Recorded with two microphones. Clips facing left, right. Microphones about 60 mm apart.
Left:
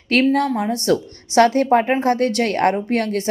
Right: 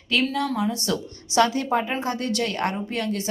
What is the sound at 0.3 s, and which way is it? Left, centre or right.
A woman's voice, left.